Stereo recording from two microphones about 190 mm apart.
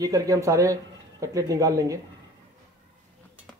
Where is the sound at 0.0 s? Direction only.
15° right (ahead or behind).